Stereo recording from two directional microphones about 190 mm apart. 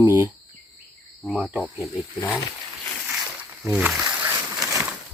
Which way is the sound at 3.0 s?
10° right (ahead or behind).